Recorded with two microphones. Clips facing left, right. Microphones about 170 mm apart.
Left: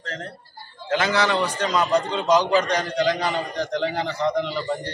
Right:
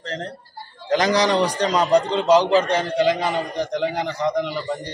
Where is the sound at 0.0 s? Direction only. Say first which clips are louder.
Right 4 dB; 35° right (ahead or behind).